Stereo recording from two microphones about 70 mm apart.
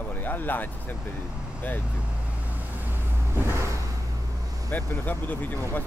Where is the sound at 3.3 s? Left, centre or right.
Right.